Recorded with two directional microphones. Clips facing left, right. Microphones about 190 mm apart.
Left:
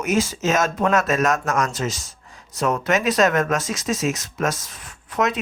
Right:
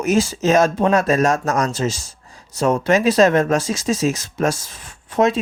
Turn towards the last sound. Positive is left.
turn(degrees=-30)  # may be behind; listen again after turning